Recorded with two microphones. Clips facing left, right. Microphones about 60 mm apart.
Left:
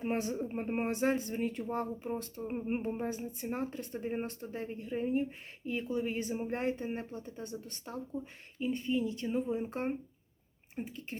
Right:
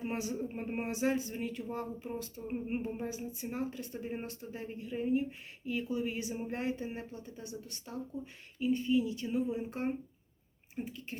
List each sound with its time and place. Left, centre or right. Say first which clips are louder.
0.0 s speech: left 2 dB; left